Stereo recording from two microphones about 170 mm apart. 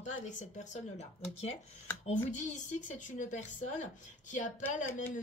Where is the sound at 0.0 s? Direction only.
45° left (ahead or behind).